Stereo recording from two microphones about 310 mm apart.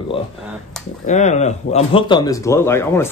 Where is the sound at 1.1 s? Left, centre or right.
Left.